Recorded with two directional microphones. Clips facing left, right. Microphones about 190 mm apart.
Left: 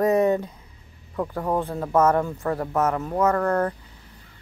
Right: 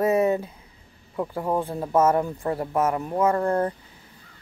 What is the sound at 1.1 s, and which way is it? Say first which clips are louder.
Speech: even; 15° right (ahead or behind).